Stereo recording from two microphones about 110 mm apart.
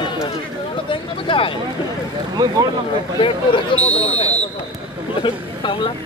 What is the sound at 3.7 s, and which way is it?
Speech, 50° left (ahead or behind).